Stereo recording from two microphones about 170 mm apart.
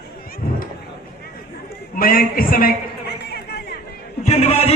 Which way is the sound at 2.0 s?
60° left (ahead or behind).